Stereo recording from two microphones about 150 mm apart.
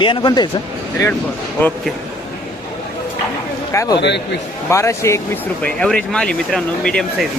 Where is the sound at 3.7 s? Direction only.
20° left (ahead or behind).